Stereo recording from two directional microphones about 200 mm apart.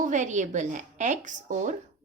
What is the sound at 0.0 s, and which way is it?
A woman's voice, 35° right (ahead or behind).